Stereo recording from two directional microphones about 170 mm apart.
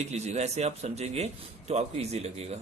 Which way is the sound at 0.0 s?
40° right (ahead or behind).